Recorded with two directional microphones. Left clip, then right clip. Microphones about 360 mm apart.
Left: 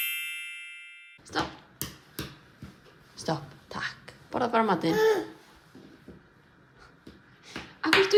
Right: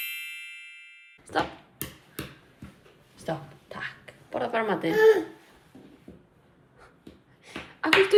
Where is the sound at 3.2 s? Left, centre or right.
Left.